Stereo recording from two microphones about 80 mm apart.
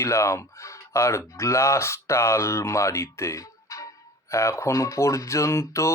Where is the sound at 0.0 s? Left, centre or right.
Left.